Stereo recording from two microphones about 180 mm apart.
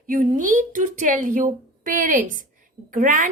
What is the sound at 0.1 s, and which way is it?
A woman's voice, 50° right (ahead or behind).